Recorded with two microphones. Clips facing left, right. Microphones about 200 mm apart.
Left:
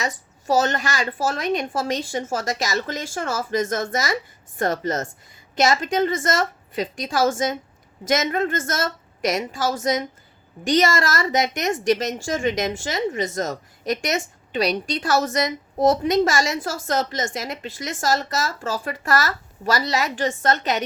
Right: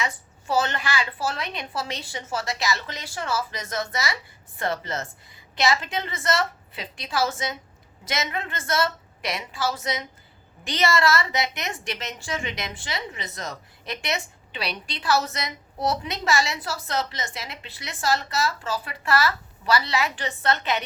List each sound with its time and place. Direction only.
0.0 s a woman's voice: 40° left (ahead or behind)